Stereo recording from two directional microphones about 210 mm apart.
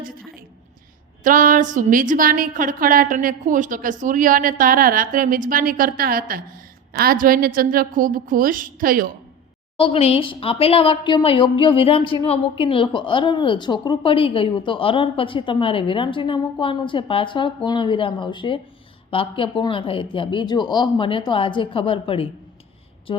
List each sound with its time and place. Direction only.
1.2 s a woman's voice: 40° right (ahead or behind)
9.7 s a woman's voice: 25° left (ahead or behind)
23.1 s a sound: 25° left (ahead or behind)